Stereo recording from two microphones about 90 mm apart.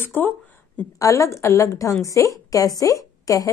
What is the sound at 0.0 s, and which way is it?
Speech, 25° left (ahead or behind).